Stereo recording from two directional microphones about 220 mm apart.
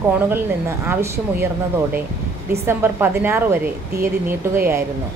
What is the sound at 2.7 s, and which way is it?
A woman's voice, 10° right (ahead or behind).